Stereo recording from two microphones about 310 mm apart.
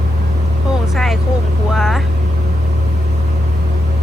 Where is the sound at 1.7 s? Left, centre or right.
Centre.